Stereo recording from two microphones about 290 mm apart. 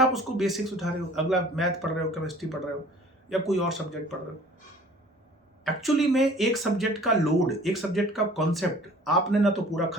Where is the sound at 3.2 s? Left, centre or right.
Centre.